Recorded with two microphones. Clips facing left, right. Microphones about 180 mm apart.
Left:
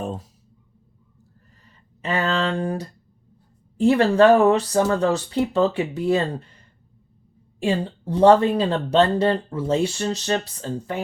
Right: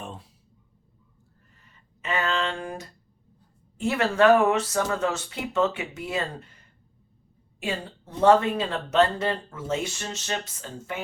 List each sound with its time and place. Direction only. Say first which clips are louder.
0.0 s speech: left 10 dB; 40° left (ahead or behind)
1.6 s a sound: left 5 dB; 35° left (ahead or behind)
3.8 s speech: left 7 dB; 30° left (ahead or behind)
7.6 s speech: left 8 dB; 35° left (ahead or behind)